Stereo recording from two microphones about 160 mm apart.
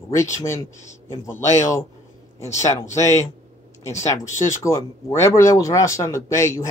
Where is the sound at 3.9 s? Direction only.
20° left (ahead or behind).